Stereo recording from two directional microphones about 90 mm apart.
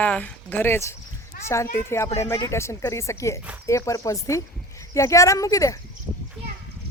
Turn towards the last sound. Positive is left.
turn(degrees=35)  # may be behind; listen again after turning